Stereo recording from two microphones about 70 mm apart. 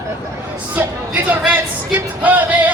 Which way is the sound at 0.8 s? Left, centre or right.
Right.